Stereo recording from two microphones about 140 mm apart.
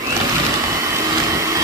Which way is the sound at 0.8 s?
20° right (ahead or behind).